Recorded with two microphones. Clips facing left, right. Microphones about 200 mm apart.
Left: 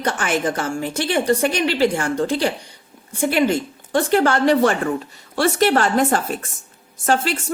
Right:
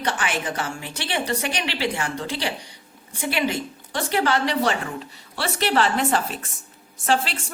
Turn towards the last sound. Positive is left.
turn(degrees=45)  # may be behind; listen again after turning